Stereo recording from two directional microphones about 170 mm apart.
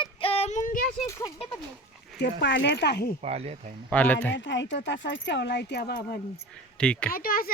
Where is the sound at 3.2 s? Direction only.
40° right (ahead or behind).